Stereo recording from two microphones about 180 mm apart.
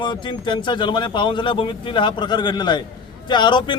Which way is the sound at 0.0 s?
25° left (ahead or behind).